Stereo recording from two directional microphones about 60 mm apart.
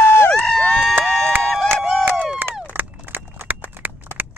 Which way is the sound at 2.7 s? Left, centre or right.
Right.